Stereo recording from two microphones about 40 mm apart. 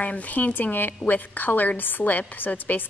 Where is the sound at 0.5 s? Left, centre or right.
Left.